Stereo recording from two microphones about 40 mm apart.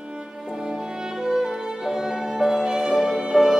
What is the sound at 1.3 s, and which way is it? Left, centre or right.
Music, centre.